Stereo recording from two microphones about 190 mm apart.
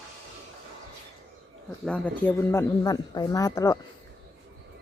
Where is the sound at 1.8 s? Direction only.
5° left (ahead or behind).